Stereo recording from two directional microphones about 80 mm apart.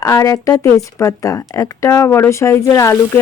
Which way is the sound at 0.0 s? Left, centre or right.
Left.